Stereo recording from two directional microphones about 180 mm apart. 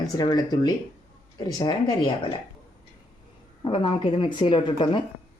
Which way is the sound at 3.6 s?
30° left (ahead or behind).